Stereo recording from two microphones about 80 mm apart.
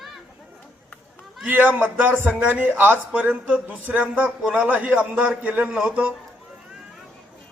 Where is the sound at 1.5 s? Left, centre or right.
Right.